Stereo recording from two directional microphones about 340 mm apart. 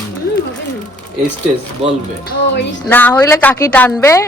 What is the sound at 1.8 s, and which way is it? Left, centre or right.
Speech, centre.